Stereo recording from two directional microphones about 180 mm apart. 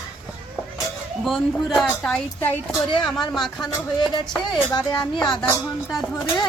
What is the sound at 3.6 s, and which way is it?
Music, 25° left (ahead or behind).